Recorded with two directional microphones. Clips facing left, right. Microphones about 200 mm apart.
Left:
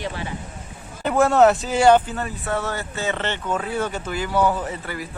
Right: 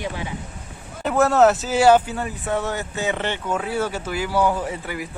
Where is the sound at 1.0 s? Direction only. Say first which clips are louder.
Even; centre (ahead or behind).